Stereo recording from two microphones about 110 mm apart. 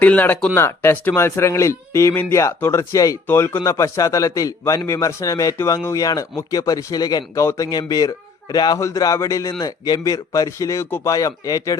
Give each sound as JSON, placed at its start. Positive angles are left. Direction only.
{"t": 0.0, "sound": "a man's voice", "side_deg": 15}